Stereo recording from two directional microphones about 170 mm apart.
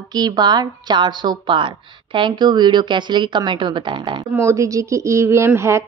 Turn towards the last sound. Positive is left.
turn(degrees=-15)  # may be behind; listen again after turning